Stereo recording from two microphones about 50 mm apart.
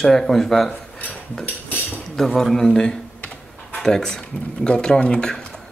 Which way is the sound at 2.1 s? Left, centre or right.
Centre.